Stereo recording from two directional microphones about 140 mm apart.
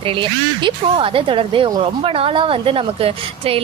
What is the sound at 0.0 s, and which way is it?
Speech, 35° right (ahead or behind).